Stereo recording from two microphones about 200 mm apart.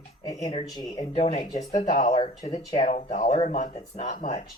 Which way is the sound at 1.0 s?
35° left (ahead or behind).